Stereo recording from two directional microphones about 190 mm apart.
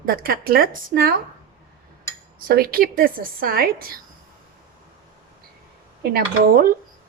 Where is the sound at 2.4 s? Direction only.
50° right (ahead or behind).